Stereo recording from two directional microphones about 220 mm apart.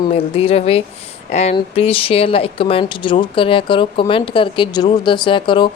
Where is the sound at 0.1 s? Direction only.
25° left (ahead or behind).